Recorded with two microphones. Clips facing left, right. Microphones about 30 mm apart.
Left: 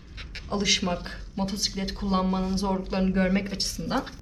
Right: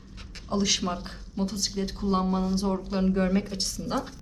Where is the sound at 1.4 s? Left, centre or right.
Left.